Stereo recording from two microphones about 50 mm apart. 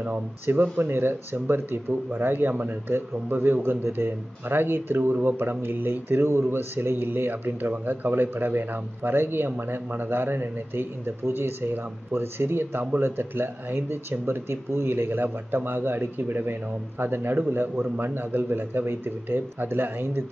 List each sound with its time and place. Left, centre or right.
0.5 s speech: right